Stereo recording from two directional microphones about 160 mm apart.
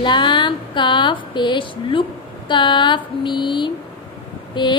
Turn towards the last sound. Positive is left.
turn(degrees=30)  # may be behind; listen again after turning